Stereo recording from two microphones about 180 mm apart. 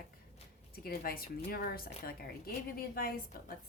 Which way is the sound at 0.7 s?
55° left (ahead or behind).